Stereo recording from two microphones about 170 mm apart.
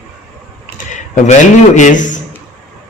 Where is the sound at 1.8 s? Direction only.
50° left (ahead or behind).